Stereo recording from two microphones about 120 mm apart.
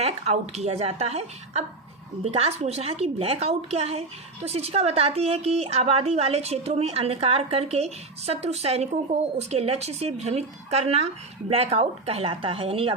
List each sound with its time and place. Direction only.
0.0 s a woman's voice: 60° right (ahead or behind)